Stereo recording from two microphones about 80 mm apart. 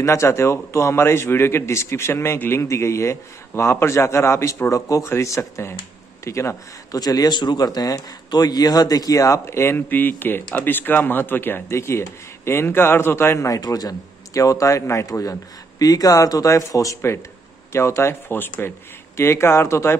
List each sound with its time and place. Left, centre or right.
0.0 s speech: left
7.0 s speech: left
13.5 s speech: left